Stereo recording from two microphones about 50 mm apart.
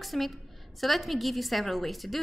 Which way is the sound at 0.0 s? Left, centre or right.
Centre.